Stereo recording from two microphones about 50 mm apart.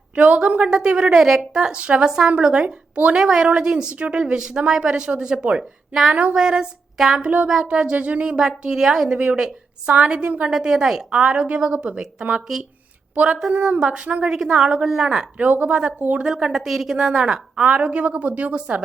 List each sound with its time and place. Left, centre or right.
0.4 s speech: right
0.7 s a woman's voice: centre
3.2 s a woman's voice: centre
5.4 s a woman's voice: right
5.9 s a woman's voice: centre
7.3 s a woman's voice: right; by 9.1 s centre
9.1 s a woman's voice: right
10.5 s a woman's voice: centre
11.1 s a woman's voice: right
13.7 s a woman's voice: centre
14.3 s a woman's voice: centre
15.4 s speech: right
16.3 s a woman's voice: centre
17.7 s a woman's voice: right